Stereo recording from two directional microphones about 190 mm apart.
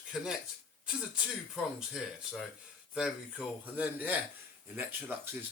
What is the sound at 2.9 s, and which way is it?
Speech, centre (ahead or behind).